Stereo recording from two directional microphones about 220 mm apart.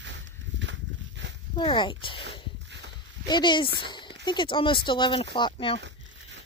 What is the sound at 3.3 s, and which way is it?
Speech, 20° left (ahead or behind).